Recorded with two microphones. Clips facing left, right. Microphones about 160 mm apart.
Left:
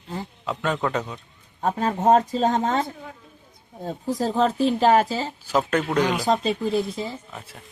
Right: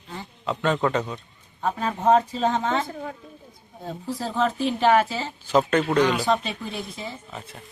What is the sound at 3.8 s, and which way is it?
Speech, 40° left (ahead or behind).